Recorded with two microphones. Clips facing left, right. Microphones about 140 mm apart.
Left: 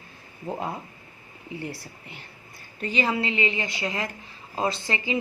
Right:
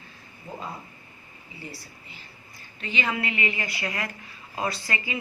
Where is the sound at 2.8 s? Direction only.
35° left (ahead or behind).